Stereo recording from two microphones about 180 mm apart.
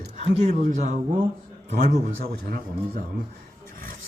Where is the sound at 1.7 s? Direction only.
45° right (ahead or behind).